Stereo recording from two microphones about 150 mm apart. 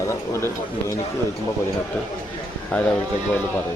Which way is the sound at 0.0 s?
20° left (ahead or behind).